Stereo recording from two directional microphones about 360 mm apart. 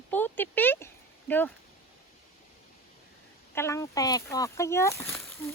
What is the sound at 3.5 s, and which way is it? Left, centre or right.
Speech, centre.